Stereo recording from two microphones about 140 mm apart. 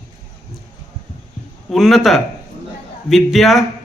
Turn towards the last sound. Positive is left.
turn(degrees=0)  # may be behind; listen again after turning